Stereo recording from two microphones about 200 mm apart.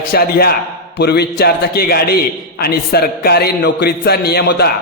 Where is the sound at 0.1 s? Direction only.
50° left (ahead or behind).